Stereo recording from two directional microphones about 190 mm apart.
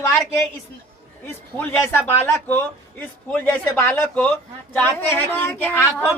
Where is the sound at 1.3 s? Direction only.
10° left (ahead or behind).